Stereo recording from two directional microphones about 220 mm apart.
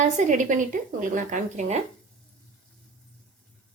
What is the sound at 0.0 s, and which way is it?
A woman's voice, 35° right (ahead or behind).